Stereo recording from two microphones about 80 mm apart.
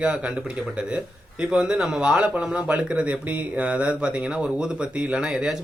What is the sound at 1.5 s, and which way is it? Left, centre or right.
Speech, centre.